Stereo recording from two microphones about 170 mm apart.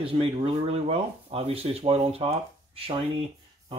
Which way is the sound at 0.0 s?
30° right (ahead or behind).